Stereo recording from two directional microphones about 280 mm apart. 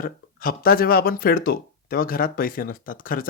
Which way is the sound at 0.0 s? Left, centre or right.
Left.